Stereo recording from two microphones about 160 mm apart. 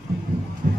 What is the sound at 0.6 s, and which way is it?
Music, 65° right (ahead or behind).